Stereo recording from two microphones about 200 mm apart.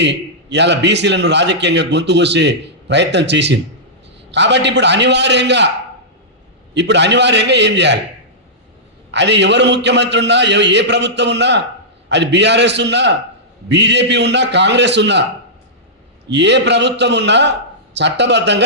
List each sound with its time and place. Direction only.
0.0 s a man's voice: 60° right (ahead or behind)
6.7 s a man's voice: 60° right (ahead or behind)
9.1 s a man's voice: 60° right (ahead or behind)
16.3 s a man's voice: 60° right (ahead or behind)